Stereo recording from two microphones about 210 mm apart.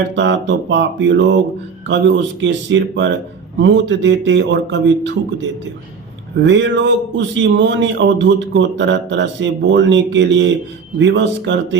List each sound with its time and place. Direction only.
0.2 s speech: 60° right (ahead or behind)